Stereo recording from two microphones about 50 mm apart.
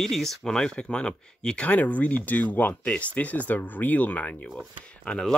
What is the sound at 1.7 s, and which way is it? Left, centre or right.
Speech, left.